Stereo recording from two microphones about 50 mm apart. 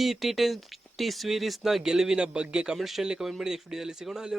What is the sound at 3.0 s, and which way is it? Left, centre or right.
A man's voice, centre.